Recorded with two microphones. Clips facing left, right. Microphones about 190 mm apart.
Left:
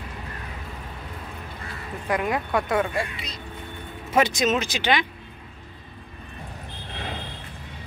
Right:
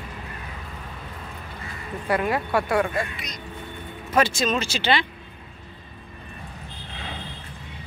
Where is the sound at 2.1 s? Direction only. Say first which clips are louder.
Right 1 dB; 15° left (ahead or behind).